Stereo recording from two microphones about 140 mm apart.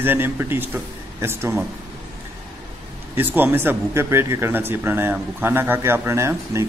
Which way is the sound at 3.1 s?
15° right (ahead or behind).